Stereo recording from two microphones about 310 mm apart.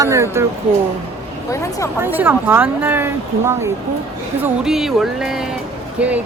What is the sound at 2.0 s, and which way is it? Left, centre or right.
Speech, centre.